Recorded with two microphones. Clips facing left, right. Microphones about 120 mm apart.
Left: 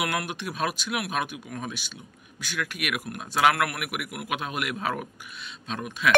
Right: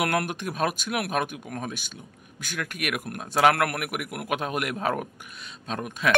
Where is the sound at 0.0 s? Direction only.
50° right (ahead or behind).